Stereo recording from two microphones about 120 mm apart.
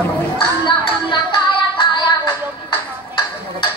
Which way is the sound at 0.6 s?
40° left (ahead or behind).